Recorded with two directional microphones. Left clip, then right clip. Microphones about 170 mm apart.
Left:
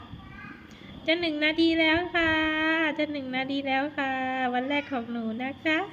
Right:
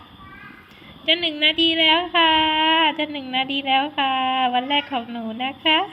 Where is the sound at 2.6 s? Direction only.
20° left (ahead or behind).